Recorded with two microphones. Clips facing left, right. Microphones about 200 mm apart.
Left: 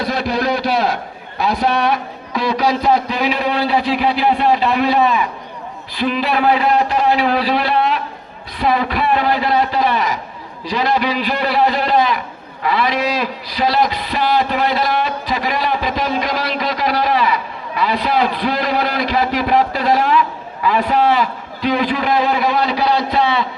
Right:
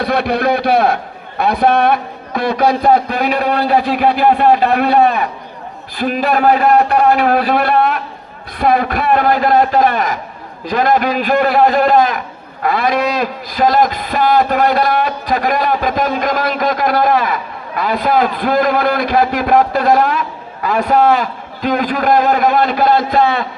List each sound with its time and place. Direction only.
0.0 s a man's voice: 60° right (ahead or behind)